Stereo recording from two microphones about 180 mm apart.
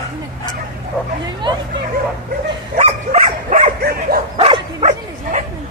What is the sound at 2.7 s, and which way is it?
Bow-wow, 35° right (ahead or behind).